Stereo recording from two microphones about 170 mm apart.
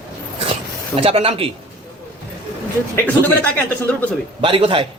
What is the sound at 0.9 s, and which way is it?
Speech, 35° right (ahead or behind).